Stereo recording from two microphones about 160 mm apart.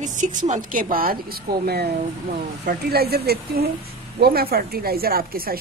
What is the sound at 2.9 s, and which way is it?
A woman's voice, 80° right.